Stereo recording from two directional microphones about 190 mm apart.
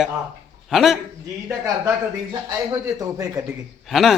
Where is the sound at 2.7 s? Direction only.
20° right (ahead or behind).